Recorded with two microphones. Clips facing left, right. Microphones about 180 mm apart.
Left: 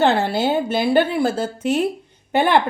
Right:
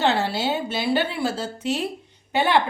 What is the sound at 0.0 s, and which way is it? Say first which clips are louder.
A woman's voice: left 5 dB; 50° left (ahead or behind).